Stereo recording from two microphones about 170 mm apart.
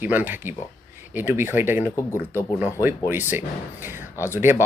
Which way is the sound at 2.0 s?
15° left (ahead or behind).